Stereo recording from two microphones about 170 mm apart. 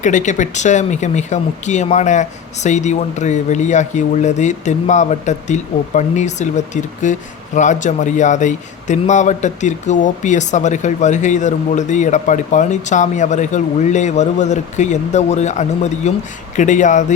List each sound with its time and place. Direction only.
0.0 s speech: 45° left (ahead or behind)